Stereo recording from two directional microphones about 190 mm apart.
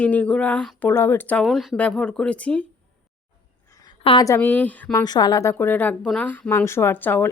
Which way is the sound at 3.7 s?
20° left (ahead or behind).